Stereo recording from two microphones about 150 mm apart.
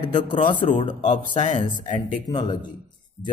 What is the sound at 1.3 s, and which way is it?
Speech, 55° left (ahead or behind).